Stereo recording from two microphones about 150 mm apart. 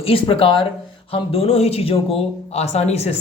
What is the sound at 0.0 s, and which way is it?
Speech, 35° left (ahead or behind).